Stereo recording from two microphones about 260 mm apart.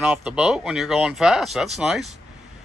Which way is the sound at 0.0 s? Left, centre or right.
Centre.